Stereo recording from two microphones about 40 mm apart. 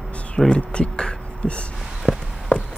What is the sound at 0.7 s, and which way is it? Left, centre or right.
Speech, left.